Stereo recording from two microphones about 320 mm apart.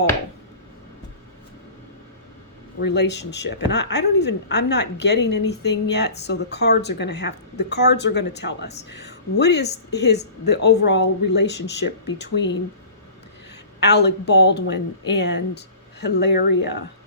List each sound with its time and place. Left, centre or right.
2.8 s a woman's voice: left
13.7 s a woman's voice: left